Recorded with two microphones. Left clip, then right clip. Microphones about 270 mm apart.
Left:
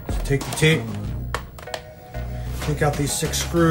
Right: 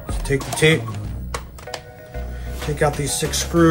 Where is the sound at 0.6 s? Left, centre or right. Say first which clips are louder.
Right 3 dB; right.